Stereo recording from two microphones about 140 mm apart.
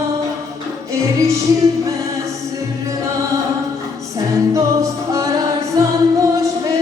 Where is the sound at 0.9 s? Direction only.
20° right (ahead or behind).